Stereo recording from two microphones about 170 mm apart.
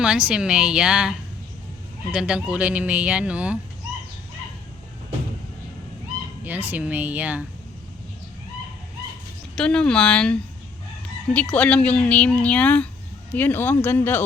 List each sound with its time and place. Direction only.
0.0 s speech: 5° right (ahead or behind)
2.1 s speech: 5° right (ahead or behind)
6.4 s speech: 10° right (ahead or behind)
9.6 s speech: 5° left (ahead or behind)
11.3 s speech: 10° left (ahead or behind)